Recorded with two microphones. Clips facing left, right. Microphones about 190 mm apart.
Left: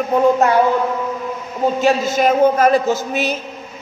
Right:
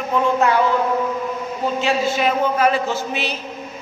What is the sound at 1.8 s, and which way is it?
A woman's voice, 45° left (ahead or behind).